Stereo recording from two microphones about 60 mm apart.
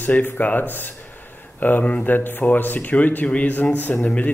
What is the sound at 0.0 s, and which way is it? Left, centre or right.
A man's voice, left.